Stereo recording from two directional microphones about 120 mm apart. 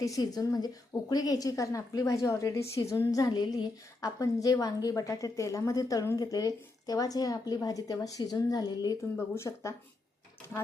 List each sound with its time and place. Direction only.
0.0 s a woman's voice: 30° left (ahead or behind)
9.3 s speech: 25° left (ahead or behind)